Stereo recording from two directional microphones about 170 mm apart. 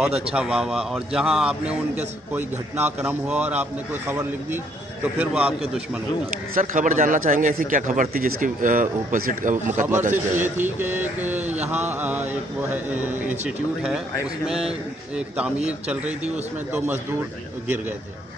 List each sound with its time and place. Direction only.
0.3 s a man's voice: 5° right (ahead or behind)
6.5 s speech: 50° right (ahead or behind)
10.4 s a man's voice: 10° right (ahead or behind)
14.2 s a man's voice: 5° right (ahead or behind)